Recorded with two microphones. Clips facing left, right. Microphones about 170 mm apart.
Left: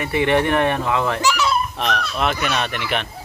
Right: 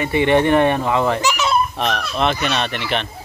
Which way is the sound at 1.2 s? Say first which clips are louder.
Even; 20° right (ahead or behind).